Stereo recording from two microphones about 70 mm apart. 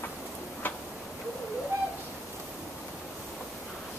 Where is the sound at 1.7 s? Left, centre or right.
Right.